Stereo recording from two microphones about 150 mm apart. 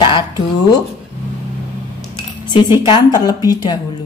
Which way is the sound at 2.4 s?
30° left (ahead or behind).